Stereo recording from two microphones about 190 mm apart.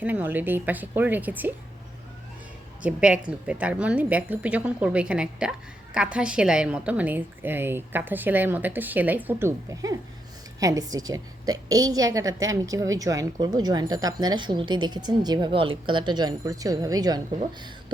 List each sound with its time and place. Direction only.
0.0 s a woman's voice: 10° right (ahead or behind)
2.8 s a woman's voice: 5° right (ahead or behind)